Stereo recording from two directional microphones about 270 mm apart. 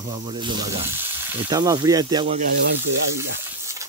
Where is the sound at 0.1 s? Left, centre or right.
Centre.